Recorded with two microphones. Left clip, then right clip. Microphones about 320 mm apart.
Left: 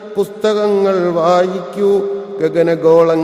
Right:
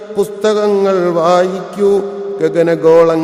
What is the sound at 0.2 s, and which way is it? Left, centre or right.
A man's voice, left.